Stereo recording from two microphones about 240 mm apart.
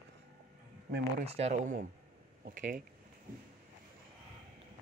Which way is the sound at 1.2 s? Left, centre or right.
Right.